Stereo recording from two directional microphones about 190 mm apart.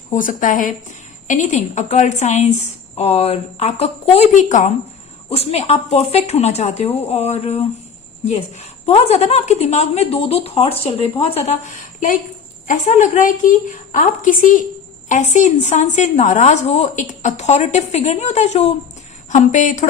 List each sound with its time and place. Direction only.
0.1 s a woman's voice: 45° left (ahead or behind)